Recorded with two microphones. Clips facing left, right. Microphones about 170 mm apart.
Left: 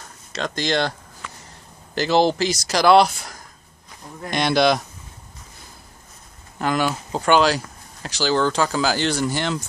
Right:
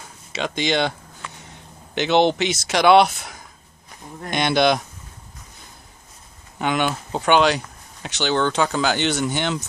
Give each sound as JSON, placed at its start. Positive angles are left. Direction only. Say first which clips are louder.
{"t": 0.0, "sound": "speech", "louder": "right 1 dB", "side_deg": -5}
{"t": 6.6, "sound": "speech", "louder": "even", "side_deg": 0}